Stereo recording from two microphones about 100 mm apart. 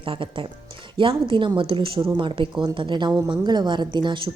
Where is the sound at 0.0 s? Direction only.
60° right (ahead or behind).